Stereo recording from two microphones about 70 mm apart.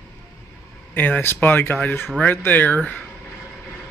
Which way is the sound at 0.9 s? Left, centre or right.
Left.